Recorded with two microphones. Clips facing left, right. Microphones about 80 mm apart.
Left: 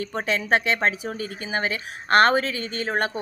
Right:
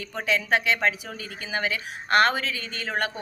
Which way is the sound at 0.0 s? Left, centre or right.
Left.